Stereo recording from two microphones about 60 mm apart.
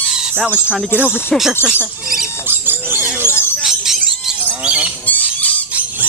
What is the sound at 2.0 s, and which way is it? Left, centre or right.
Speech, centre.